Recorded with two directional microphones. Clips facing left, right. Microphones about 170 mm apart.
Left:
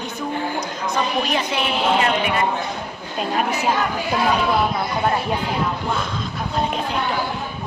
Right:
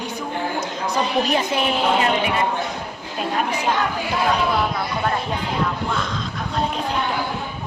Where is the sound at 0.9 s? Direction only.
45° right (ahead or behind).